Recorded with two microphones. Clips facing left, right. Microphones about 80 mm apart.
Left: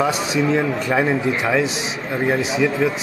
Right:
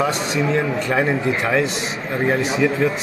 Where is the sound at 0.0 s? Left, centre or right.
Centre.